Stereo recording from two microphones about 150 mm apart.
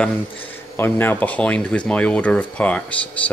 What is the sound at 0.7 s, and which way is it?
Speech, 15° left (ahead or behind).